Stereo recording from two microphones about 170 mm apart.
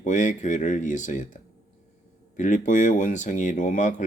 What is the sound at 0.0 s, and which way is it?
Speech, 45° left (ahead or behind).